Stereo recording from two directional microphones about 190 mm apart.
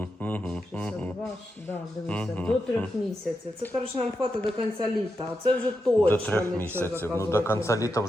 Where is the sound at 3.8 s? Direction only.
30° right (ahead or behind).